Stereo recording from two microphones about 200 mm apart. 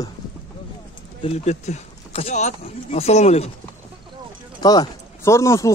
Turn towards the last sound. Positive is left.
turn(degrees=15)  # may be behind; listen again after turning